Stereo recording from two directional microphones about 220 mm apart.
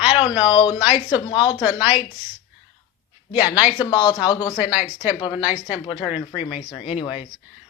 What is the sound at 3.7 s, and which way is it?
Speech, 20° left (ahead or behind).